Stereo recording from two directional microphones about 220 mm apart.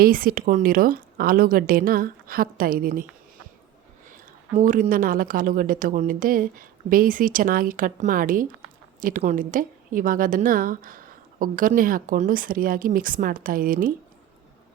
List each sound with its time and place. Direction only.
0.0 s a woman's voice: 40° right (ahead or behind)
4.1 s a woman's voice: 35° right (ahead or behind)